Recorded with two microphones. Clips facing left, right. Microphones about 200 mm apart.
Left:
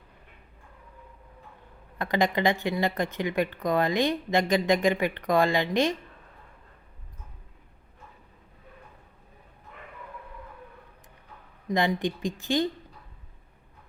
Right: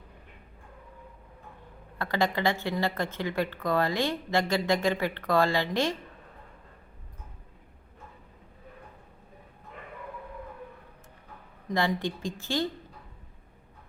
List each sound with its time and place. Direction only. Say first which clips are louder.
2.0 s speech: left 3 dB; 15° left (ahead or behind)
11.7 s speech: left 2 dB; 15° left (ahead or behind)